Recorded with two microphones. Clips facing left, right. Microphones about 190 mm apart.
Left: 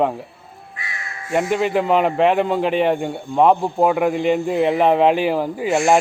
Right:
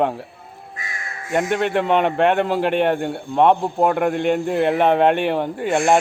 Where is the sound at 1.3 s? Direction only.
Centre (ahead or behind).